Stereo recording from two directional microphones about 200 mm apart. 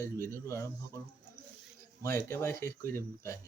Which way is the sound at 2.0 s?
15° left (ahead or behind).